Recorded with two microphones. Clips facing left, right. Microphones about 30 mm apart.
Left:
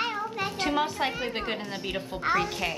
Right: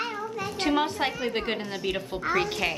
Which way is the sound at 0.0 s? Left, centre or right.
Left.